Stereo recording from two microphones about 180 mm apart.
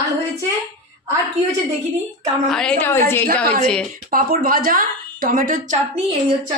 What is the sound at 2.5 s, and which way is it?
Speech, 5° left (ahead or behind).